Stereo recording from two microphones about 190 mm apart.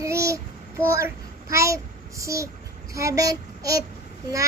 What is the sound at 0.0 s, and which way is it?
Child singing, 15° right (ahead or behind).